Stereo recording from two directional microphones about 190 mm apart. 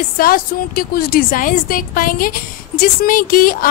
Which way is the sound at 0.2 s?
50° left (ahead or behind).